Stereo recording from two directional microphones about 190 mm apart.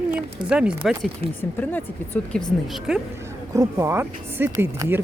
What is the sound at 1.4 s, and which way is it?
Speech, 10° left (ahead or behind).